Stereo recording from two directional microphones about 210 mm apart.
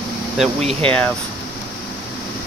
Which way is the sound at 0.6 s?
25° right (ahead or behind).